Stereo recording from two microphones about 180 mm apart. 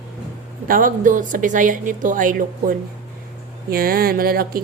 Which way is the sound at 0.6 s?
50° right (ahead or behind).